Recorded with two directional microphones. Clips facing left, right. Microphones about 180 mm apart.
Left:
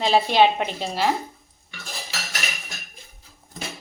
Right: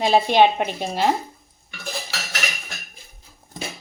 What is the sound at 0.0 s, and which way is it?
A woman's voice, 15° right (ahead or behind).